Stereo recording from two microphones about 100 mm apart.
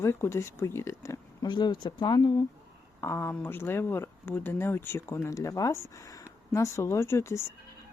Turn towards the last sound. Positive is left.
turn(degrees=30)  # may be behind; listen again after turning